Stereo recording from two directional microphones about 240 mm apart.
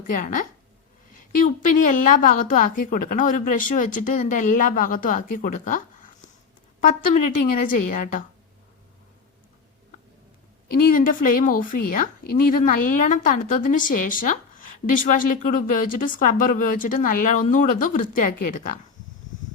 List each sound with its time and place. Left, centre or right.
0.1 s a woman's voice: left
1.2 s a sound: left
2.0 s a woman's voice: left
10.9 s a woman's voice: left